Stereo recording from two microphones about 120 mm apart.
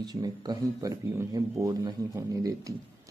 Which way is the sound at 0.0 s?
35° right (ahead or behind).